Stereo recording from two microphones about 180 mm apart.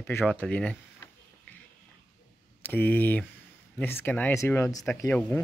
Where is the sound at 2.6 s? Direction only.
10° left (ahead or behind).